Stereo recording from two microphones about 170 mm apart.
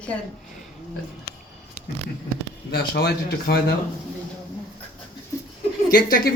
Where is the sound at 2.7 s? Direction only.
70° left (ahead or behind).